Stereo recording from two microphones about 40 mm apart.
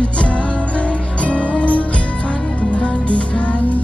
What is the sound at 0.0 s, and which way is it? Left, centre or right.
Music, left.